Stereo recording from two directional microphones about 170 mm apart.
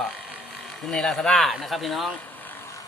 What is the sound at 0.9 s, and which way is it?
Speech, 5° left (ahead or behind).